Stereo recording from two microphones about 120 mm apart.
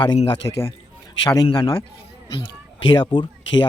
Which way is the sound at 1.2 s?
30° left (ahead or behind).